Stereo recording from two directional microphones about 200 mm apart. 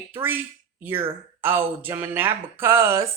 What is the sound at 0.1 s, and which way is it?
Speech, 10° right (ahead or behind).